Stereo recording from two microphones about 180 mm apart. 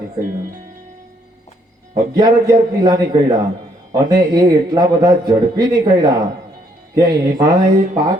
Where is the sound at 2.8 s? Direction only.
25° right (ahead or behind).